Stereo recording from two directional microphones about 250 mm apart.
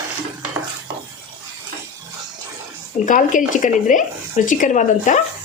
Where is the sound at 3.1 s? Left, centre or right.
Left.